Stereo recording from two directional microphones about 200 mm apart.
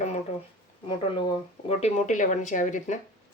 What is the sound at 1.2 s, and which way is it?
Speech, 30° left (ahead or behind).